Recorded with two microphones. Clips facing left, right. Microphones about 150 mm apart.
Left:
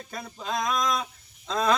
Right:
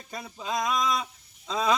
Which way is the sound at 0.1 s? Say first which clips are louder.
Even; 5° right (ahead or behind).